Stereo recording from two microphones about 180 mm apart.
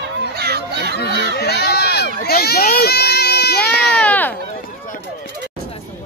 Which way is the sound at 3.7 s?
65° left (ahead or behind).